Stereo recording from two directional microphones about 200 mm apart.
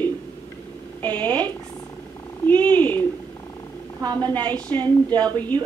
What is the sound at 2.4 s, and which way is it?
Purr, 10° left (ahead or behind).